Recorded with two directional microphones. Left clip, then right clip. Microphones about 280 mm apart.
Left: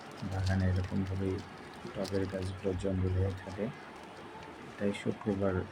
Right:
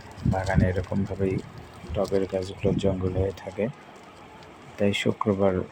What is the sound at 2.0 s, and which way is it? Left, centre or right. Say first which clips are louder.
Speech: right 10 dB; centre.